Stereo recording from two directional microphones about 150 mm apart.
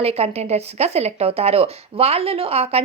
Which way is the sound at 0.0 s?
45° right (ahead or behind).